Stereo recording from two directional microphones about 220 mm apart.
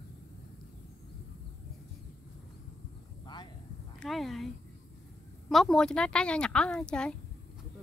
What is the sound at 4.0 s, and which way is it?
Speech, centre (ahead or behind).